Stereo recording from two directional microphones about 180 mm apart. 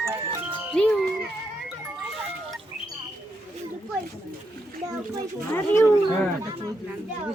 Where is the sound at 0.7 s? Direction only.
5° left (ahead or behind).